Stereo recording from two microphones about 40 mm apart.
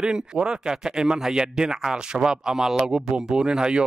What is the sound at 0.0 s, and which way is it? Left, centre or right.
Speech, centre.